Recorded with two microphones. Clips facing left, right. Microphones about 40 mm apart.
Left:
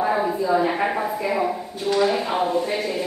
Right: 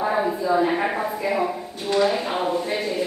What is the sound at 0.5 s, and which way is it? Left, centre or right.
Speech, centre.